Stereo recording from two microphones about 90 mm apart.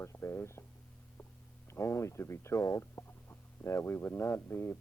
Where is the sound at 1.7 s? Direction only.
30° left (ahead or behind).